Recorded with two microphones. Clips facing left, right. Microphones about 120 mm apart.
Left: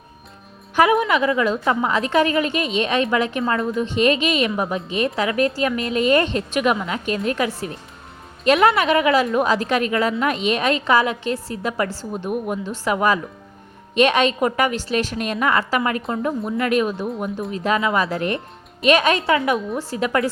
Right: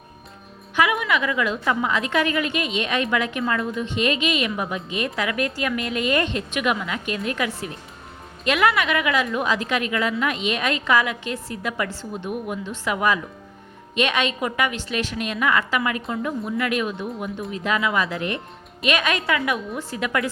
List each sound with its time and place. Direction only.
0.8 s a woman's voice: 35° left (ahead or behind)